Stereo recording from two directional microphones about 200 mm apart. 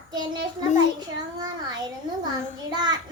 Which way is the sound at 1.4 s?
20° right (ahead or behind).